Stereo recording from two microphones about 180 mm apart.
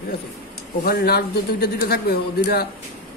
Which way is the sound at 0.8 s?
60° left (ahead or behind).